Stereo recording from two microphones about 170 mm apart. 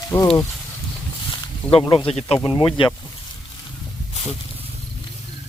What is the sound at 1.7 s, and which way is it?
Speech, 35° left (ahead or behind).